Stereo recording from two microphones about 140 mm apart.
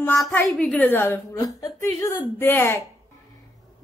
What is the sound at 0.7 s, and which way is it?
A woman's voice, 15° left (ahead or behind).